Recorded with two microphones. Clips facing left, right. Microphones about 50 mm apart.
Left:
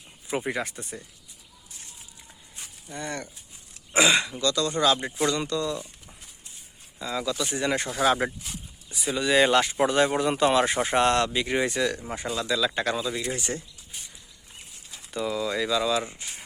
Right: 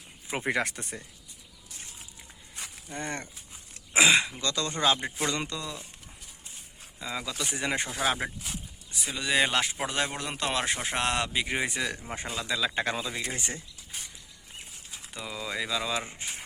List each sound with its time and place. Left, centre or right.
0.4 s speech: right
2.9 s speech: right
3.9 s speech: centre
4.4 s speech: right
7.0 s speech: centre
7.9 s speech: centre
12.1 s speech: right
15.1 s speech: centre; by 16.2 s right